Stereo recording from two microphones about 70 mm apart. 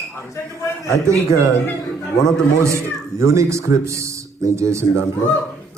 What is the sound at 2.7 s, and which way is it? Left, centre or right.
Speech, right.